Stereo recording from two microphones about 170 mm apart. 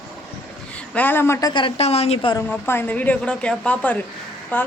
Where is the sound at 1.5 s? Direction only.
30° left (ahead or behind).